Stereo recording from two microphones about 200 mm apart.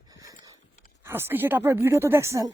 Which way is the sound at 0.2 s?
15° right (ahead or behind).